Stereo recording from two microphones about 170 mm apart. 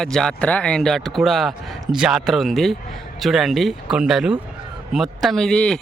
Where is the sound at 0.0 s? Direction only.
5° left (ahead or behind).